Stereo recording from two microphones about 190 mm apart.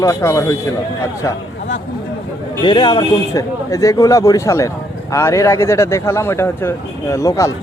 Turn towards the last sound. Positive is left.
turn(degrees=15)  # may be behind; listen again after turning